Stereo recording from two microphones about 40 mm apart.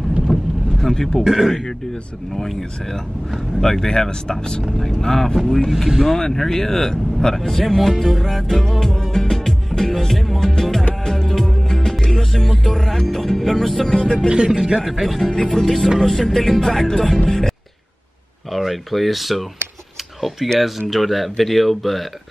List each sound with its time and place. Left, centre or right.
0.3 s boat: centre
1.2 s speech: centre
3.6 s speech: centre
7.9 s speech: centre
8.2 s music: centre
10.5 s speech: centre
11.1 s music: centre
14.3 s speech: centre
14.8 s speech: centre
15.3 s speech: centre
18.5 s speech: centre
20.5 s speech: centre